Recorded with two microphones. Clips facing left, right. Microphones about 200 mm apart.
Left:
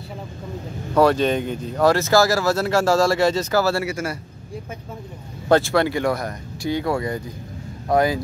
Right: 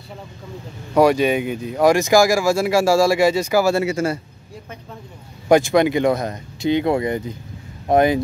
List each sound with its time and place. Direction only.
0.9 s speech: 10° right (ahead or behind)
5.5 s speech: 15° right (ahead or behind)